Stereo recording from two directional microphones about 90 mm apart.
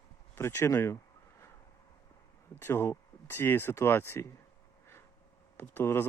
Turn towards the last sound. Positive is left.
turn(degrees=25)  # may be behind; listen again after turning